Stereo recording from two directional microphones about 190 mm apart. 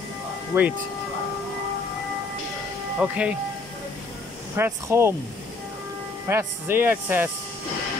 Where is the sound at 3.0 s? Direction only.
5° right (ahead or behind).